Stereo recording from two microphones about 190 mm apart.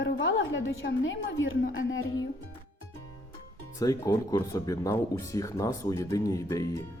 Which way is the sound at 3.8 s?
20° left (ahead or behind).